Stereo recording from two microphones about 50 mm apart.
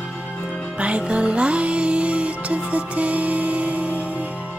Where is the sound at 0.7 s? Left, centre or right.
Right.